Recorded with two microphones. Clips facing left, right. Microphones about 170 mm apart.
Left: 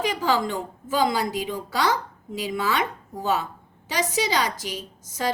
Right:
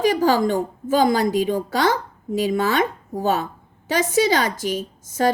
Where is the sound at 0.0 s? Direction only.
40° right (ahead or behind).